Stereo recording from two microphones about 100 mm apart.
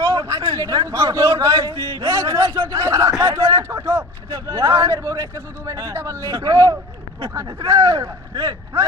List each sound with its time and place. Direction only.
0.0 s a man's voice: 35° right (ahead or behind)